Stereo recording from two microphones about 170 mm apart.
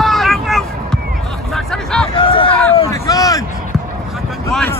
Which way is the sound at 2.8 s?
20° left (ahead or behind).